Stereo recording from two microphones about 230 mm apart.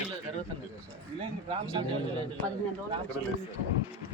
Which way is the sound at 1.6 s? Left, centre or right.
Centre.